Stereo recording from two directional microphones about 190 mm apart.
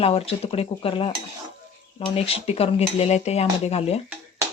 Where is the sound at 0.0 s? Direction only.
30° left (ahead or behind).